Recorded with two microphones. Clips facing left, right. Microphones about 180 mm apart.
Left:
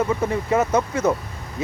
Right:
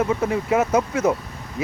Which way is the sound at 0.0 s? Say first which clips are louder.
Right 1 dB; 5° right (ahead or behind).